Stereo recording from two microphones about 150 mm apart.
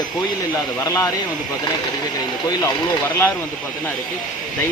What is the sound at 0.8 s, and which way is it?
Speech, 20° left (ahead or behind).